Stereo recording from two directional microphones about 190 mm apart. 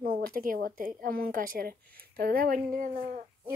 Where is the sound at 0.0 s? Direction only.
50° right (ahead or behind).